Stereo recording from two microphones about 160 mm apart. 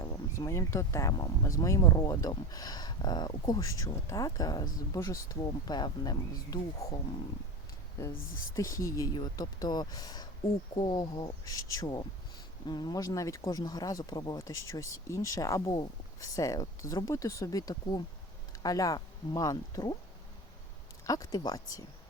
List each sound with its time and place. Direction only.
0.0 s speech: 20° left (ahead or behind)
8.5 s speech: 20° left (ahead or behind)
21.1 s speech: 25° left (ahead or behind)